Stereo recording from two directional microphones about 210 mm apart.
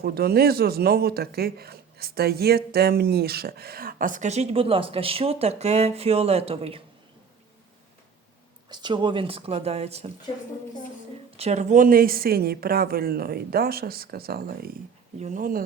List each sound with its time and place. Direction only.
0.0 s speech: 50° right (ahead or behind); by 6.8 s 25° right (ahead or behind)
8.7 s speech: 20° right (ahead or behind)
11.3 s speech: 30° right (ahead or behind)